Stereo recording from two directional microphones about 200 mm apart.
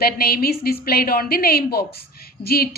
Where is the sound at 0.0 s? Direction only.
50° left (ahead or behind).